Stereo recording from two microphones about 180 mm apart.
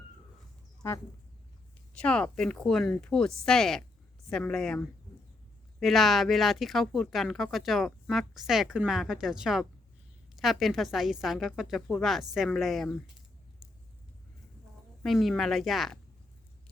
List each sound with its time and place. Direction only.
0.8 s speech: 15° left (ahead or behind)
1.9 s speech: 5° left (ahead or behind)
15.0 s speech: centre (ahead or behind)